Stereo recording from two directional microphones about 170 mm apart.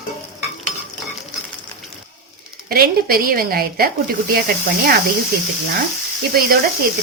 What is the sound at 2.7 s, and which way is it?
A woman's voice, 60° right (ahead or behind).